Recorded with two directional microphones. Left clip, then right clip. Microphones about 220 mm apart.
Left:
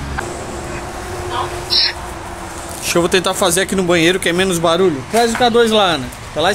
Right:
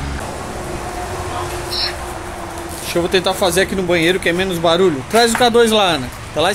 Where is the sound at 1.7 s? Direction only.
50° left (ahead or behind).